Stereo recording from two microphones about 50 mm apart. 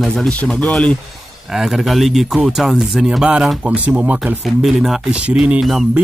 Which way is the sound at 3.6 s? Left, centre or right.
Right.